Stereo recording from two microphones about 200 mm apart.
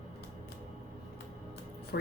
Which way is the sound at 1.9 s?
50° left (ahead or behind).